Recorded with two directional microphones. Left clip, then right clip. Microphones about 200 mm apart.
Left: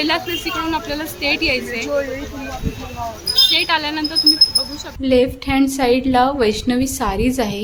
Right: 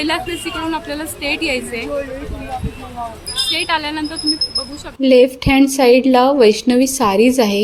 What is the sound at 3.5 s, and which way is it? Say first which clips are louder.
A woman's voice: left 1 dB; 5° right (ahead or behind).